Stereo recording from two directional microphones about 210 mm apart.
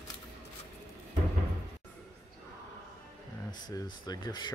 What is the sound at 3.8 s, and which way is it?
Speech, 20° left (ahead or behind).